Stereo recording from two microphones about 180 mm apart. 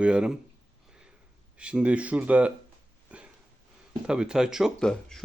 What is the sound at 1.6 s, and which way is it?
Speech, 5° right (ahead or behind).